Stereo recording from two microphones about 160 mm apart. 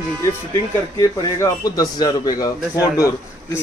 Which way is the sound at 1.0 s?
20° left (ahead or behind).